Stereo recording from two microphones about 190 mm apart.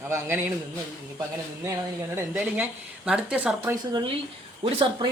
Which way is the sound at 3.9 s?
25° right (ahead or behind).